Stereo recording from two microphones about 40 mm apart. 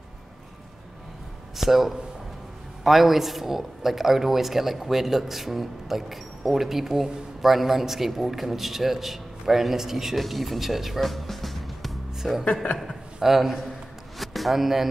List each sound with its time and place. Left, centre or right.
1.6 s a woman's voice: centre